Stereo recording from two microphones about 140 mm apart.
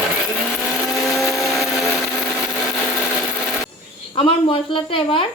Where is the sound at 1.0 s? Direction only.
Centre (ahead or behind).